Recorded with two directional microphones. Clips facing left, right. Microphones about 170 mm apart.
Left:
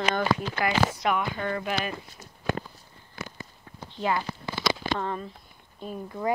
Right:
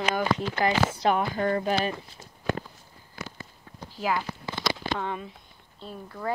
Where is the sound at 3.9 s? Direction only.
5° right (ahead or behind).